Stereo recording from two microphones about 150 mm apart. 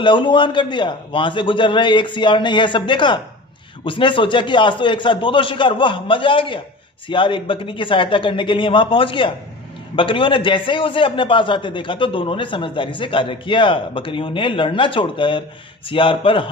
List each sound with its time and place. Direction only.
0.0 s a man's voice: 35° left (ahead or behind)